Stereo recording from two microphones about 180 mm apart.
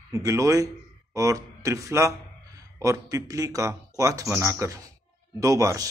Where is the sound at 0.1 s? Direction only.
20° right (ahead or behind).